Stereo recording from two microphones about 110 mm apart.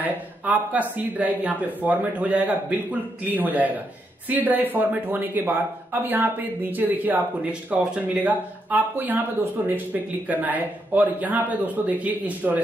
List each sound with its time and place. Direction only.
0.0 s speech: 15° right (ahead or behind)